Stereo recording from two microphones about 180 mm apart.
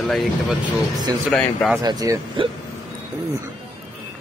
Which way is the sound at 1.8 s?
20° right (ahead or behind).